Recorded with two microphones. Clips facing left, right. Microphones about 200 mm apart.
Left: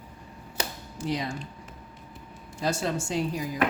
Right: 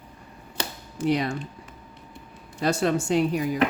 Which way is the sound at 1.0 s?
65° right (ahead or behind).